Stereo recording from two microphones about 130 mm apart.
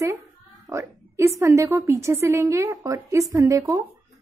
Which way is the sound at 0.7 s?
20° right (ahead or behind).